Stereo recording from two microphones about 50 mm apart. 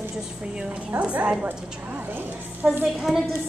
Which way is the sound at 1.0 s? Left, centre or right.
Right.